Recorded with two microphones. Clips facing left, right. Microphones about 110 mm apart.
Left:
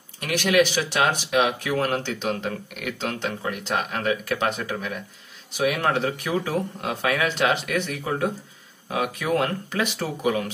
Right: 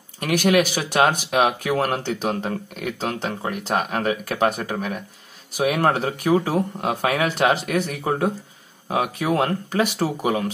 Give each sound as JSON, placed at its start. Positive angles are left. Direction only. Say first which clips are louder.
{"t": 0.2, "sound": "speech", "louder": "right 2 dB", "side_deg": -40}